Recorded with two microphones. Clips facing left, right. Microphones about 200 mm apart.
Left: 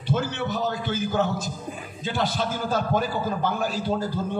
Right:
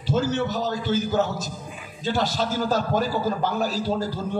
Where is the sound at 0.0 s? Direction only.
55° left (ahead or behind).